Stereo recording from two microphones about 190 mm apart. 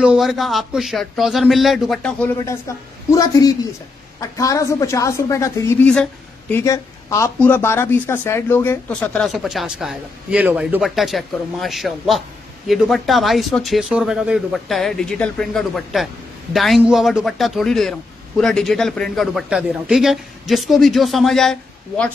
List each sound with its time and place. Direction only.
0.0 s a man's voice: 5° right (ahead or behind)